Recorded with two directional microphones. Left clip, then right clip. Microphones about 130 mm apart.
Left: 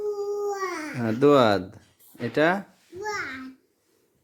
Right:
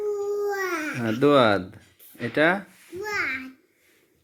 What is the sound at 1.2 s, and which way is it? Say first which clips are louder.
Speech: even; 30° left (ahead or behind).